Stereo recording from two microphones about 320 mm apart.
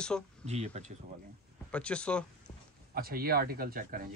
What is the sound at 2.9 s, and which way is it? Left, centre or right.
Speech, right.